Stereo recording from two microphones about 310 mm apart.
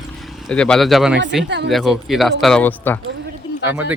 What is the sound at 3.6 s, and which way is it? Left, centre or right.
Speech, centre.